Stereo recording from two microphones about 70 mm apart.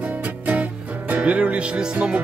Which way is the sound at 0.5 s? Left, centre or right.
Right.